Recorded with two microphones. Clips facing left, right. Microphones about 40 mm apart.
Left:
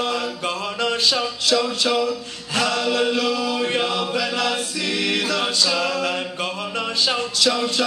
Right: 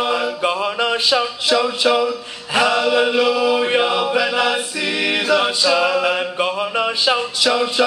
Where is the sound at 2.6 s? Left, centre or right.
Right.